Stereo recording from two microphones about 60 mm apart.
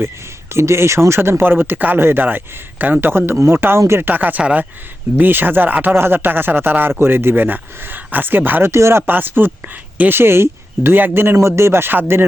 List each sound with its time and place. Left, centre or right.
0.5 s speech: right
4.0 s speech: right
8.7 s speech: right
11.3 s speech: right